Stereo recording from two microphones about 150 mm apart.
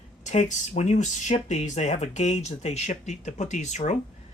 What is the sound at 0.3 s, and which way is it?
Speech, 55° left (ahead or behind).